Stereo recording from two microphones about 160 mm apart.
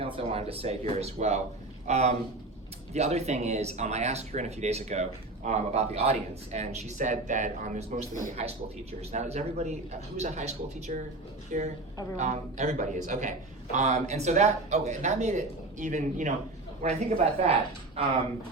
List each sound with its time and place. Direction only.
0.0 s a man's voice: 40° right (ahead or behind)